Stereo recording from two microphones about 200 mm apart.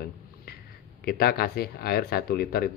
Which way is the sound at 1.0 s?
50° left (ahead or behind).